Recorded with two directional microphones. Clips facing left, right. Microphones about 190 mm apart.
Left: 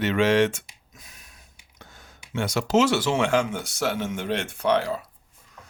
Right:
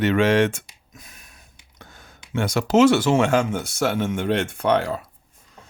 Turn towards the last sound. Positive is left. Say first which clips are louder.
# right 2 dB
turn(degrees=-50)  # may be behind; listen again after turning